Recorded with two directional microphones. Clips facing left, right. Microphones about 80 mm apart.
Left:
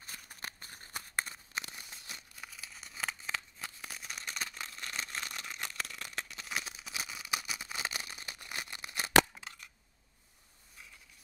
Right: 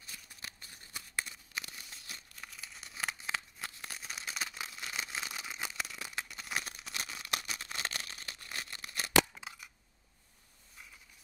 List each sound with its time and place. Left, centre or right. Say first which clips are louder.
0.0 s scissors: left 3 dB; left
2.4 s tearing: right 1 dB; centre; by 9.1 s left
9.4 s a sound: right 1 dB; centre